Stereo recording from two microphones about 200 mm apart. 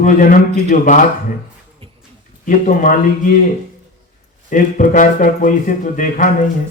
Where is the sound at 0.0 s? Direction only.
40° left (ahead or behind).